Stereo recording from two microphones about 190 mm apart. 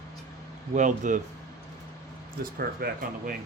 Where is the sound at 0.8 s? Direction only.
40° right (ahead or behind).